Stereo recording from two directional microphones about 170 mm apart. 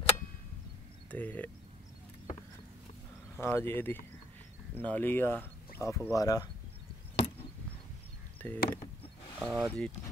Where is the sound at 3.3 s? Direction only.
15° left (ahead or behind).